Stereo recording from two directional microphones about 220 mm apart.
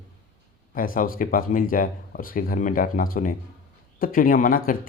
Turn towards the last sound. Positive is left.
turn(degrees=40)  # may be behind; listen again after turning